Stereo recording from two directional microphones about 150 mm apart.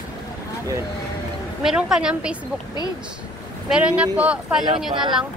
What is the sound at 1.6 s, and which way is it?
Speech, 5° right (ahead or behind).